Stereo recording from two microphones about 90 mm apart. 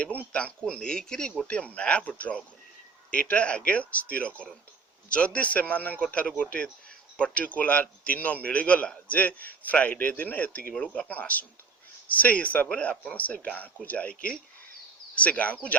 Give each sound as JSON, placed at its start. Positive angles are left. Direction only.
{"t": 0.3, "sound": "a man's voice", "side_deg": 10}